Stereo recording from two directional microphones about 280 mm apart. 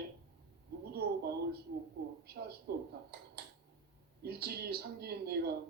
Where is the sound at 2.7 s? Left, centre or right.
Right.